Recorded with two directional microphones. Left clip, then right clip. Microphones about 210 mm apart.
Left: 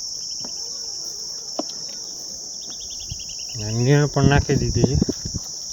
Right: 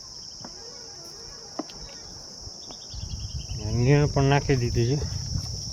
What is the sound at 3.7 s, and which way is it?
Cricket, 15° left (ahead or behind).